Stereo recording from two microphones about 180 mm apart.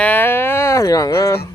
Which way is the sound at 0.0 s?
10° left (ahead or behind).